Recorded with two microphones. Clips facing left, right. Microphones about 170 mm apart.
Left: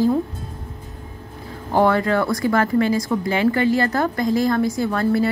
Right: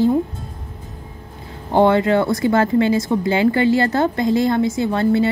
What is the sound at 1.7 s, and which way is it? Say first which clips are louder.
Speech: right 3 dB; 25° right (ahead or behind).